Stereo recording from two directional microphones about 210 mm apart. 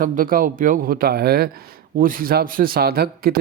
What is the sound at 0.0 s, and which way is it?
A man's voice, 40° right (ahead or behind).